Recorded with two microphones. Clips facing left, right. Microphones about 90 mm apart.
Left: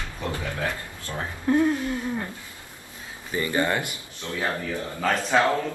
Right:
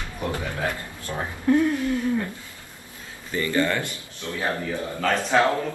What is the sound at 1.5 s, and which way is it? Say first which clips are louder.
Speech: right 1 dB; 20° left (ahead or behind).